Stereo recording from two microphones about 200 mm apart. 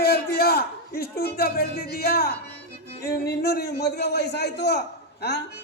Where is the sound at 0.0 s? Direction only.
50° left (ahead or behind).